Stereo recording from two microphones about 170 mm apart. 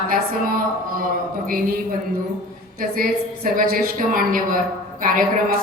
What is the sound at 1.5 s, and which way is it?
A woman's voice, 55° right (ahead or behind).